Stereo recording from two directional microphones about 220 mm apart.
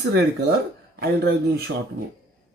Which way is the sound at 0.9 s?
45° right (ahead or behind).